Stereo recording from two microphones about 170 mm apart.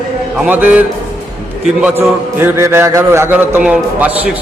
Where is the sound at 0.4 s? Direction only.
10° right (ahead or behind).